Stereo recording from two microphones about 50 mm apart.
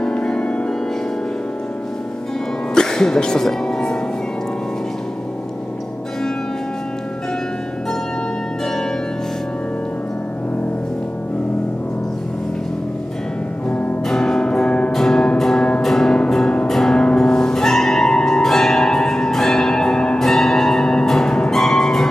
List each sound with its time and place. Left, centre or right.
0.0 s change ringing: centre
2.7 s music: centre
14.0 s music: centre
14.9 s music: centre